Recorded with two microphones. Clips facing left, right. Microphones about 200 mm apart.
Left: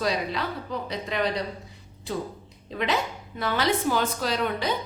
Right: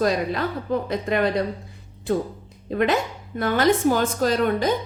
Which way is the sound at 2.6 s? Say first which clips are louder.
Right 6 dB; 50° right (ahead or behind).